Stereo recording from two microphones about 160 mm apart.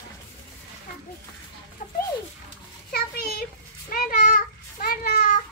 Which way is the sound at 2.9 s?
75° left (ahead or behind).